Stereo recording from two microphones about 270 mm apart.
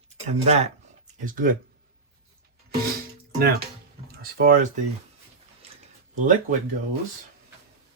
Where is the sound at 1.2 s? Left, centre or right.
Right.